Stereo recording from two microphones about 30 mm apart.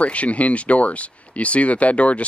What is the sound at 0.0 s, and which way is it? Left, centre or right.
Speech, left.